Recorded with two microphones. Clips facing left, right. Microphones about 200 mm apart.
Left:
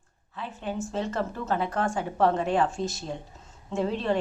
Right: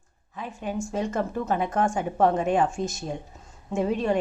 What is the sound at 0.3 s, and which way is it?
A woman's voice, 15° right (ahead or behind).